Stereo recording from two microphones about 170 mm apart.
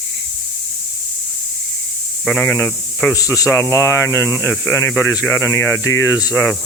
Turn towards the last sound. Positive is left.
turn(degrees=15)  # may be behind; listen again after turning